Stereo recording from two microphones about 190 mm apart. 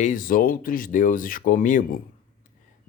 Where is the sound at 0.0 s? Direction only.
45° left (ahead or behind).